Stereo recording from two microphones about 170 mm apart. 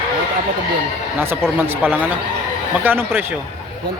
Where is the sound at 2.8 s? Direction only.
10° right (ahead or behind).